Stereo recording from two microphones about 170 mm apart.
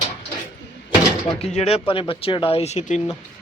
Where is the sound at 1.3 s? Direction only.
35° left (ahead or behind).